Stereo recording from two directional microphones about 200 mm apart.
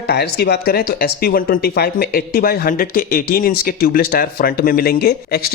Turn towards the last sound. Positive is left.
turn(degrees=50)  # may be behind; listen again after turning